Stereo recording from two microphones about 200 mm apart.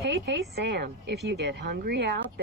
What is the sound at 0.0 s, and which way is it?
A woman's voice, 60° right (ahead or behind).